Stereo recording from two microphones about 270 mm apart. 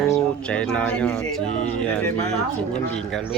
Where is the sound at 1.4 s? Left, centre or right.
Left.